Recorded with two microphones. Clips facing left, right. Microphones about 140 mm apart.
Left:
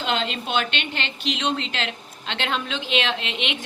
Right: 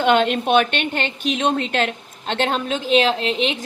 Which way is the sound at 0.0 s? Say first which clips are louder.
Right 9 dB; 55° right (ahead or behind).